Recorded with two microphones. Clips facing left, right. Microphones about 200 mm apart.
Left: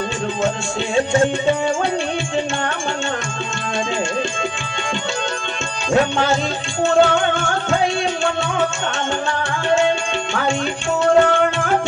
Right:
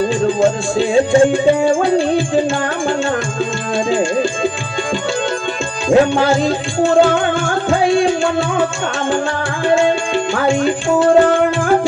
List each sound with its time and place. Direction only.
0.4 s music: 30° right (ahead or behind)
3.9 s music: 35° right (ahead or behind)
5.9 s music: 30° right (ahead or behind)
11.0 s music: 30° right (ahead or behind)